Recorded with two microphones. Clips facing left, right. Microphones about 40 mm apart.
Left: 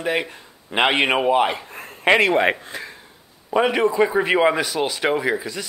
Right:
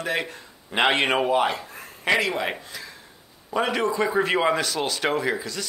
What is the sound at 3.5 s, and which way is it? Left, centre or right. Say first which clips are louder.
A man's voice: left 5 dB; left.